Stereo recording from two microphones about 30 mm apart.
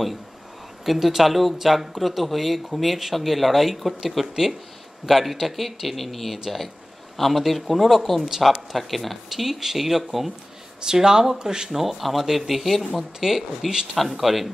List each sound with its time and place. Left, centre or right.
0.9 s speech: centre
8.7 s speech: centre
10.9 s speech: right
11.7 s speech: centre